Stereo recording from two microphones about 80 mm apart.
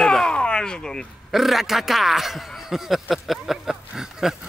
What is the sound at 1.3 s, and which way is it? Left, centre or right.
Speech, centre.